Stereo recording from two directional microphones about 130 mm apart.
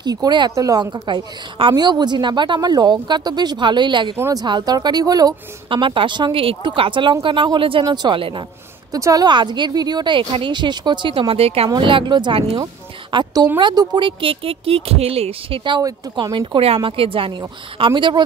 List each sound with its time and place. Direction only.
0.0 s a woman's voice: 30° right (ahead or behind)
8.9 s a woman's voice: 30° right (ahead or behind); by 11.7 s 50° right (ahead or behind)
11.8 s a woman's voice: 40° right (ahead or behind)
13.1 s a sound: 35° right (ahead or behind)
13.6 s a woman's voice: 35° right (ahead or behind)